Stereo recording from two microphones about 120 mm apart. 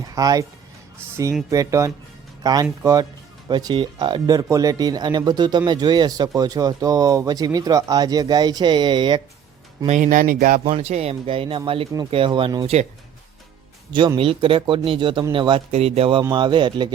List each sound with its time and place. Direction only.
0.1 s speech: 30° right (ahead or behind)
9.8 s speech: 85° right
10.6 s speech: 55° right (ahead or behind)
12.6 s speech: 65° right (ahead or behind)
14.2 s speech: 50° right (ahead or behind)
15.7 s speech: 60° right (ahead or behind)
16.3 s speech: 40° right (ahead or behind)